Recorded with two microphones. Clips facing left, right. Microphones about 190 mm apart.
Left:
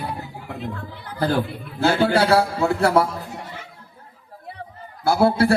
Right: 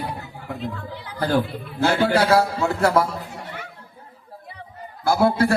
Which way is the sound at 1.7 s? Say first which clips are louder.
Left 1 dB; 35° left (ahead or behind).